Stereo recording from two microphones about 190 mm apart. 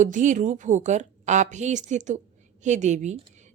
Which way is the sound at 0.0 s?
40° right (ahead or behind).